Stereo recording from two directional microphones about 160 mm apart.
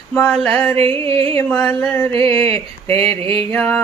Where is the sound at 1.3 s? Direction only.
15° left (ahead or behind).